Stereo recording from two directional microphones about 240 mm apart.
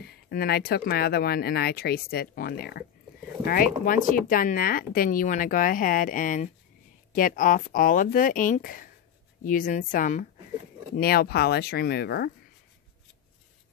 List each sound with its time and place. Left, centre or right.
0.0 s speech: left
3.8 s speech: left